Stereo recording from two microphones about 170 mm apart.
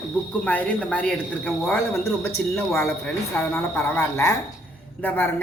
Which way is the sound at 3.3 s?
10° left (ahead or behind).